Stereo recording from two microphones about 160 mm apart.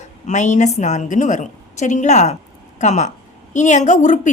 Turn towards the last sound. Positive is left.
turn(degrees=50)  # may be behind; listen again after turning